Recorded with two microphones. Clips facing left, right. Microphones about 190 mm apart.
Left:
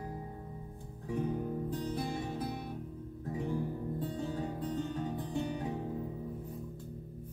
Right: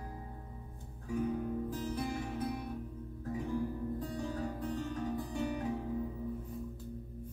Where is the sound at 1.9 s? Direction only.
30° left (ahead or behind).